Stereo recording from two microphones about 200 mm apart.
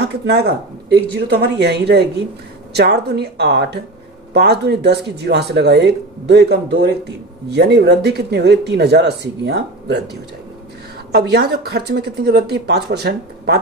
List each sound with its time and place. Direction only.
0.0 s speech: 55° right (ahead or behind)
11.1 s speech: 55° right (ahead or behind)